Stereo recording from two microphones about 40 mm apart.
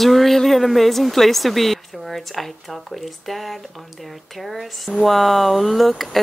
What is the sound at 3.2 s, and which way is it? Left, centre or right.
Speech, centre.